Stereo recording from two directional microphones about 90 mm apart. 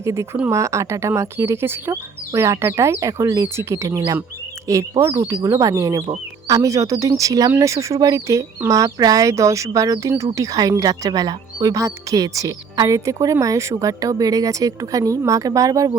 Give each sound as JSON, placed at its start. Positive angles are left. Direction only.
{"t": 0.0, "sound": "speech", "side_deg": -35}